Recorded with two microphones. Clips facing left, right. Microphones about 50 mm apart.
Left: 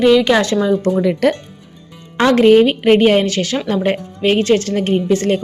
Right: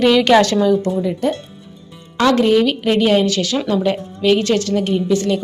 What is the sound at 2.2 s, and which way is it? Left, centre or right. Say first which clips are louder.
A woman's voice: left 4 dB; left.